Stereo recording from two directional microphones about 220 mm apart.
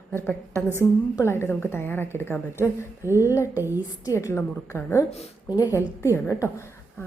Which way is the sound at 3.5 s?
10° right (ahead or behind).